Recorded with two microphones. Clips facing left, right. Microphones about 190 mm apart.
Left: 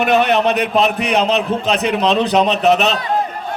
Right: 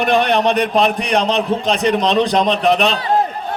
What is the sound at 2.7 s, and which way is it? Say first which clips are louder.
Speech: left 1 dB; 40° left (ahead or behind).